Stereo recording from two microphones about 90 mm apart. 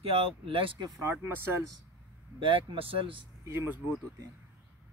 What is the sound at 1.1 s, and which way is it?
Speech, 20° right (ahead or behind).